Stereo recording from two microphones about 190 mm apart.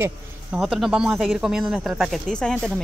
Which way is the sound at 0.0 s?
5° right (ahead or behind).